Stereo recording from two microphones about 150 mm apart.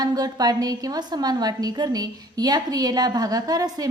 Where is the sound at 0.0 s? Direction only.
25° right (ahead or behind).